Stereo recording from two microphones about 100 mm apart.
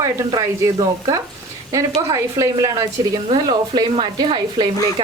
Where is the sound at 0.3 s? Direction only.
40° right (ahead or behind).